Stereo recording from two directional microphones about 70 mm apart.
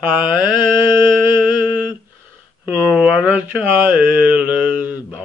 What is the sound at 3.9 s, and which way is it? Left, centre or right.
Mantra, right.